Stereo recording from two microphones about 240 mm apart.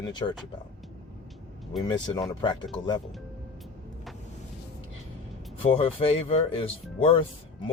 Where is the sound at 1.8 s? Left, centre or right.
Centre.